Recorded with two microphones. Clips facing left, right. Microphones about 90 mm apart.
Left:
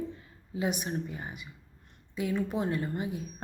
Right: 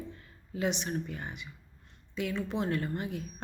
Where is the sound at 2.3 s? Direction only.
15° left (ahead or behind).